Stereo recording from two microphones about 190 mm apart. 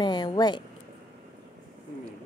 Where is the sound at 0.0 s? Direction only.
20° left (ahead or behind).